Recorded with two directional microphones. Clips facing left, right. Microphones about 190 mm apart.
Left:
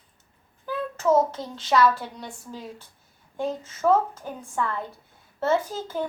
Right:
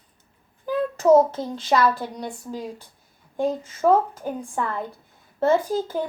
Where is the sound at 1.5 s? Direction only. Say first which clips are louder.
Even; 15° right (ahead or behind).